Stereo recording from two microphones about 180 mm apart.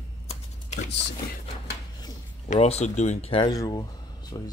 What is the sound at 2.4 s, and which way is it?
Speech, 35° left (ahead or behind).